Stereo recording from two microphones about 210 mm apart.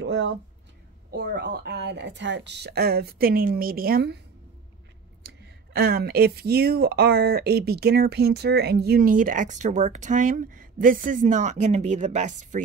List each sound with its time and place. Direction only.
0.0 s speech: 55° right (ahead or behind)
5.2 s speech: 50° right (ahead or behind)